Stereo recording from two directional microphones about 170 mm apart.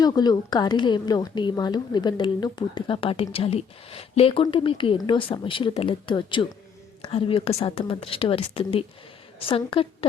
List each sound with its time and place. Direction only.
0.0 s a woman's voice: 25° left (ahead or behind)